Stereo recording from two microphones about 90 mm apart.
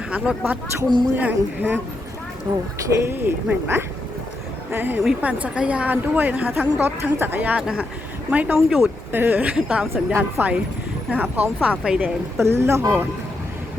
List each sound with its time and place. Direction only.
0.1 s a woman's voice: 15° right (ahead or behind)
3.0 s a woman's voice: 25° right (ahead or behind)
5.2 s a woman's voice: 15° right (ahead or behind)
8.5 s speech: 5° right (ahead or behind)
9.1 s a woman's voice: 20° right (ahead or behind)
12.4 s speech: 30° right (ahead or behind)